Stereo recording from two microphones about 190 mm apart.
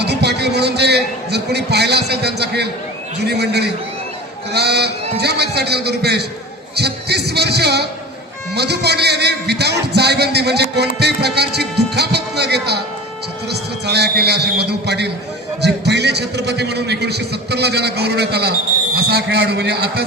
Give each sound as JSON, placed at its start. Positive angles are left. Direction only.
{"t": 0.0, "sound": "a man's voice", "side_deg": -60}